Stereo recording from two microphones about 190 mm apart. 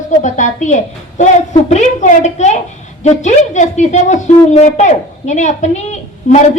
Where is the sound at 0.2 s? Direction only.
40° left (ahead or behind).